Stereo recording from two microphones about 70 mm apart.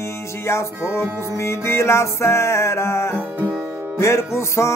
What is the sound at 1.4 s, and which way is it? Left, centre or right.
Music, left.